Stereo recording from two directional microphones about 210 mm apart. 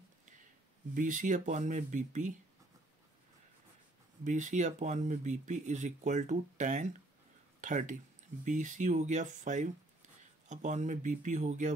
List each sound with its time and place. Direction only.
0.9 s speech: 35° right (ahead or behind)
4.2 s speech: 35° right (ahead or behind)